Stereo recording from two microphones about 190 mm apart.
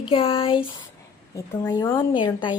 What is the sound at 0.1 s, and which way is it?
Speech, 30° left (ahead or behind).